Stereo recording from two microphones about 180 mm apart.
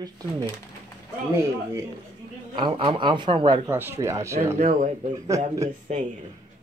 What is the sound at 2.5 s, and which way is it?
A man's voice, 30° right (ahead or behind).